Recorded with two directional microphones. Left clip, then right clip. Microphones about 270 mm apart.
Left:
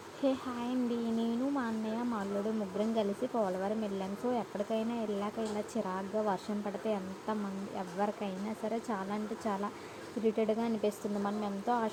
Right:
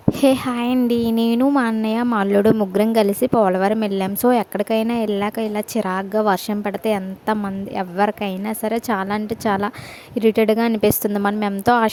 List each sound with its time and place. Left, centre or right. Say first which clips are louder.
0.2 s speech: right 15 dB; right